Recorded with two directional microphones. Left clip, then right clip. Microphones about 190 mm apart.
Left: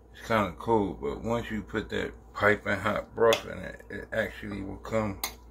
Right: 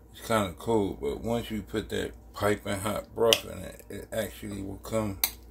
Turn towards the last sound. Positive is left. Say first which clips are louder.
# left 1 dB
turn(degrees=-30)  # may be behind; listen again after turning